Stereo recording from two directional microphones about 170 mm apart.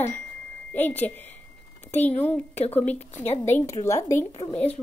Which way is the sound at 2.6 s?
35° left (ahead or behind).